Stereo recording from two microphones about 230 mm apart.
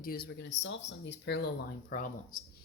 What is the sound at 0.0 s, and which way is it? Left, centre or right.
Speech, left.